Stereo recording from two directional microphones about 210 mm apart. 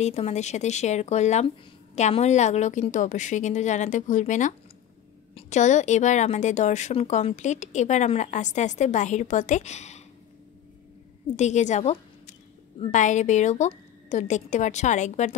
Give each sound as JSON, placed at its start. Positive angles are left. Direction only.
{"t": 0.0, "sound": "a woman's voice", "side_deg": 30}
{"t": 11.3, "sound": "a woman's voice", "side_deg": 35}